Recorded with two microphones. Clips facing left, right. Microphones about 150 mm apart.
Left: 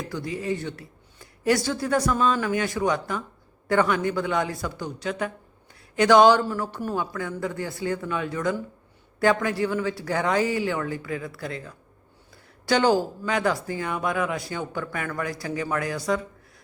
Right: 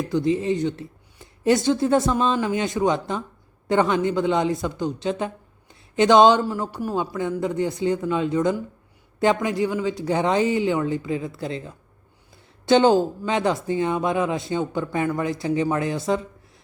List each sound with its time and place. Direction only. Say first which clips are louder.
0.0 s speech: right 9 dB; 20° right (ahead or behind)